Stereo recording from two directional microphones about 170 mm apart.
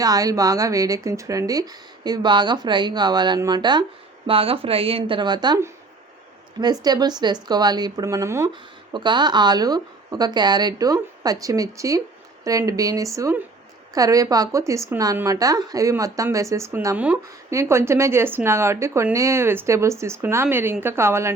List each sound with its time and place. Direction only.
0.0 s speech: 20° right (ahead or behind)